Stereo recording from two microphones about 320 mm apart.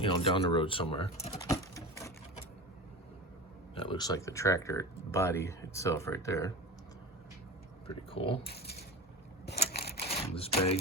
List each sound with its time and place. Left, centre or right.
0.0 s speech: centre
3.8 s speech: centre
7.9 s speech: centre
8.4 s speech: left
9.6 s a sound: left